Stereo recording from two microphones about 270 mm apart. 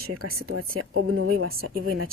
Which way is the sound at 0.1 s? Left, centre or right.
Right.